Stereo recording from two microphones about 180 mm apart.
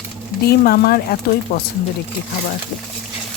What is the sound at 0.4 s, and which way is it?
Speech, 60° left (ahead or behind).